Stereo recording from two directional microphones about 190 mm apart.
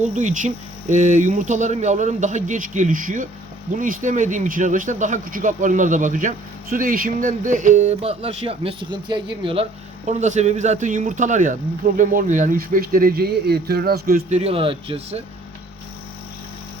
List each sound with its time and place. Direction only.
0.0 s speech: 40° right (ahead or behind)
10.1 s speech: 40° right (ahead or behind)